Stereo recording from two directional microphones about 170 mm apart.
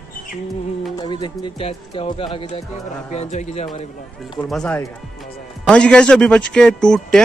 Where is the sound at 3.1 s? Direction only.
40° left (ahead or behind).